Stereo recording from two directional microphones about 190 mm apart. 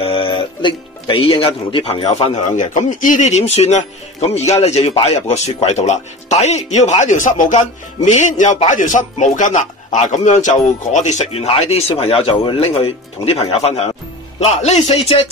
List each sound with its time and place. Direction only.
0.0 s speech: 30° left (ahead or behind)